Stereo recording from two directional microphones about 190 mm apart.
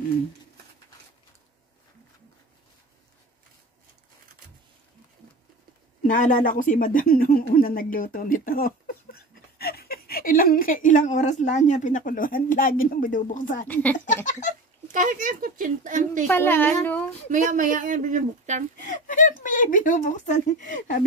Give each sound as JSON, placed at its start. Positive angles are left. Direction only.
{"t": 6.0, "sound": "speech", "side_deg": 45}
{"t": 14.9, "sound": "a woman's voice", "side_deg": -45}
{"t": 16.3, "sound": "a woman's voice", "side_deg": 10}
{"t": 17.3, "sound": "a woman's voice", "side_deg": -45}
{"t": 18.8, "sound": "speech", "side_deg": 40}